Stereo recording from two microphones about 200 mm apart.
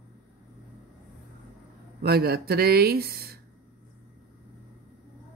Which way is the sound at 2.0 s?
50° right (ahead or behind).